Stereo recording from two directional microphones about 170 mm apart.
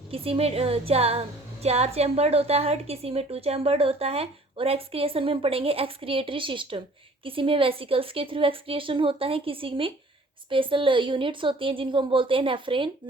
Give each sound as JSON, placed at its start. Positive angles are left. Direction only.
{"t": 0.1, "sound": "a woman's voice", "side_deg": -35}